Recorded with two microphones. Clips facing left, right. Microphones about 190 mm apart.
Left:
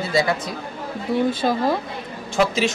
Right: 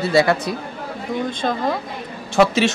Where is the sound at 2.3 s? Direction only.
70° right (ahead or behind).